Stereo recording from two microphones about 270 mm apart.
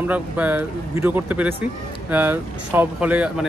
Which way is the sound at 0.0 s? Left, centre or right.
Centre.